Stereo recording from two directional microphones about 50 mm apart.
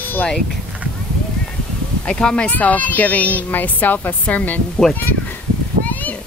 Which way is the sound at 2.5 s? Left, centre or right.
Left.